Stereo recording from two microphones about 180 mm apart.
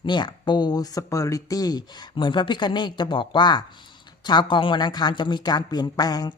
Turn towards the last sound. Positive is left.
turn(degrees=20)  # may be behind; listen again after turning